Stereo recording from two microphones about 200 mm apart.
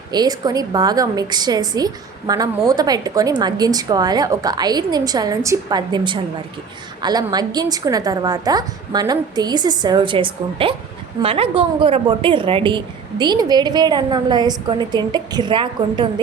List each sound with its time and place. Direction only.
0.1 s a woman's voice: 20° right (ahead or behind)